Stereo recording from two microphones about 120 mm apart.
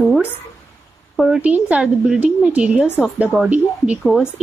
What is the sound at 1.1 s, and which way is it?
A woman's voice, 5° right (ahead or behind).